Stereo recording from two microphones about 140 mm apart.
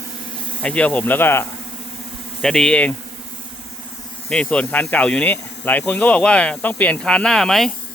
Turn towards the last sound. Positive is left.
turn(degrees=0)  # may be behind; listen again after turning